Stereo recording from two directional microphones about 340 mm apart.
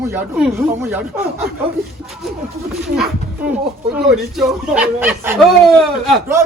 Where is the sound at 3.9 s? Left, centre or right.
Centre.